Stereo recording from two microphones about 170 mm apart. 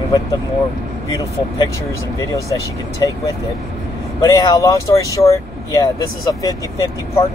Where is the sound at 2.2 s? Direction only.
20° left (ahead or behind).